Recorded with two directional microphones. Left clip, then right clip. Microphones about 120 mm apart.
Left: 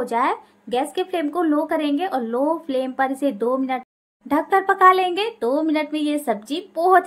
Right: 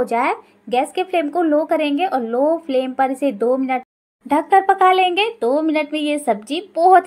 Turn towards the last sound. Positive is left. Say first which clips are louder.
# right 4 dB
turn(degrees=-15)  # may be behind; listen again after turning